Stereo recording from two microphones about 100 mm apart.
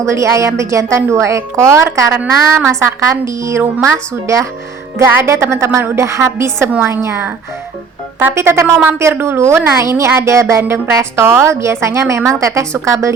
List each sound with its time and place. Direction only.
0.0 s a woman's voice: 30° right (ahead or behind)